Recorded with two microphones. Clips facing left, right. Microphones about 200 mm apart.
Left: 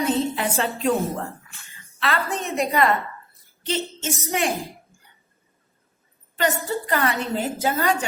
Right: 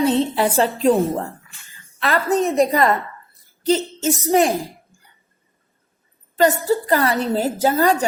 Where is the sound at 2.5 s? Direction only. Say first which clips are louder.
Even; 40° right (ahead or behind).